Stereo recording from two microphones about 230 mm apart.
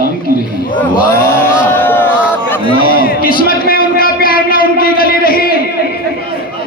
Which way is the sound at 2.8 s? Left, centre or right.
Left.